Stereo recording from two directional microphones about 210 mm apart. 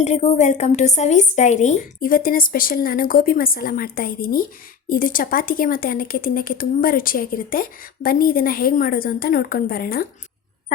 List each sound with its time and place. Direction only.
0.0 s speech: 30° left (ahead or behind)